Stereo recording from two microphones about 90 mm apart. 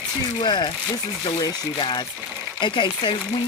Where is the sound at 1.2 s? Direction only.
45° left (ahead or behind).